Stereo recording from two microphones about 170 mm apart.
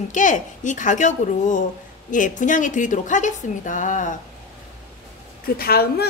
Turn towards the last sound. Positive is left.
turn(degrees=65)  # may be behind; listen again after turning